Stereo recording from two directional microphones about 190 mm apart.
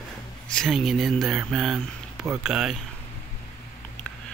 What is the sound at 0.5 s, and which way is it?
Speech, centre (ahead or behind).